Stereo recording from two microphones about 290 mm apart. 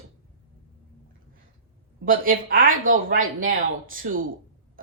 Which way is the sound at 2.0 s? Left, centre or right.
Right.